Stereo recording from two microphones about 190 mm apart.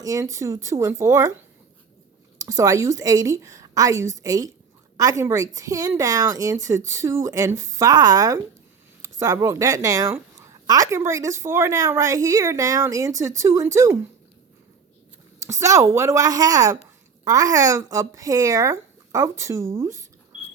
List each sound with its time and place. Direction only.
0.0 s a woman's voice: 15° right (ahead or behind)
2.4 s a woman's voice: 15° right (ahead or behind)
15.4 s a woman's voice: 15° right (ahead or behind)